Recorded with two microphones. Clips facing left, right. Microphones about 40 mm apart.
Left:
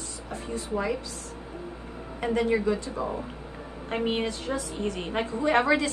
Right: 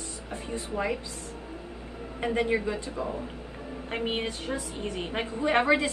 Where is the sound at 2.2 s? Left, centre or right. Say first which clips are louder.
Left 2 dB; right.